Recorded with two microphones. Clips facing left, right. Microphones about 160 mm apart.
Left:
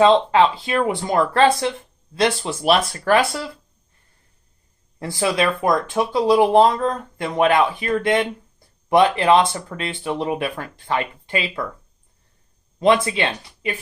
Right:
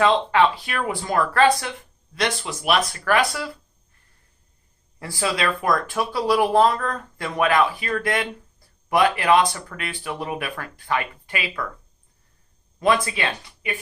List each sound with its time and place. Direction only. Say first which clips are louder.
0.0 s speech: left 4 dB; 25° left (ahead or behind)
4.9 s speech: left 4 dB; 25° left (ahead or behind)
12.8 s speech: left 4 dB; 25° left (ahead or behind)